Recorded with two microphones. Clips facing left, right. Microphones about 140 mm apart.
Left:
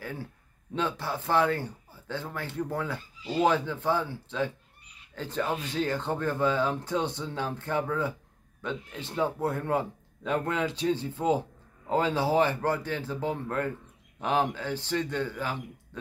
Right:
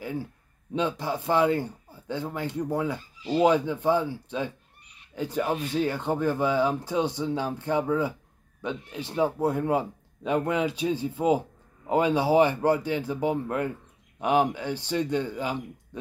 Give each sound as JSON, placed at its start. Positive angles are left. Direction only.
{"t": 0.0, "sound": "speech", "side_deg": -15}